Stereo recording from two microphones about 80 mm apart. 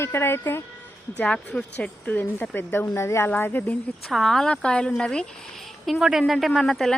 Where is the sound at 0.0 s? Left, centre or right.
Left.